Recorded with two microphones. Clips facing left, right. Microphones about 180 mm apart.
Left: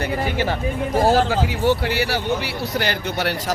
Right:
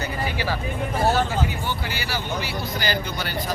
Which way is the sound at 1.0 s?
90° left.